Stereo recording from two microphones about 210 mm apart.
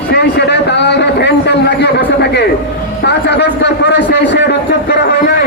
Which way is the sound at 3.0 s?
55° left (ahead or behind).